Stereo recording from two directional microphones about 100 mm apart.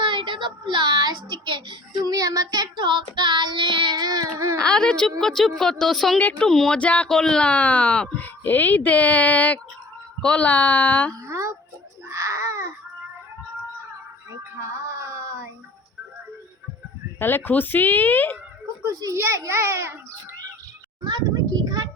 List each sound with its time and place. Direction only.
0.0 s child singing: 55° right (ahead or behind); by 4.5 s 35° right (ahead or behind)
4.5 s a woman's voice: 10° left (ahead or behind)
6.1 s speech: 15° left (ahead or behind)
11.1 s speech: 30° right (ahead or behind)
12.0 s baby cry: 30° right (ahead or behind)
14.6 s child singing: 30° right (ahead or behind)
17.2 s speech: 20° left (ahead or behind)
18.9 s a child's voice: 35° right (ahead or behind)
21.0 s a sound: 45° right (ahead or behind)